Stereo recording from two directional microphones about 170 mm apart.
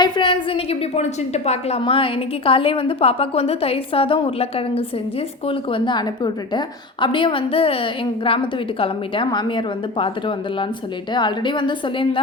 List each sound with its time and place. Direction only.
0.0 s a woman's voice: 30° left (ahead or behind)